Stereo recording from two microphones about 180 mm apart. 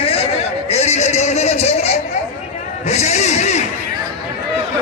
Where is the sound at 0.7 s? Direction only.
35° left (ahead or behind).